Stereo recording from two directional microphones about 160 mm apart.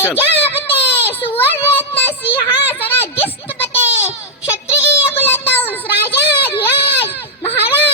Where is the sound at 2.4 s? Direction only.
30° left (ahead or behind).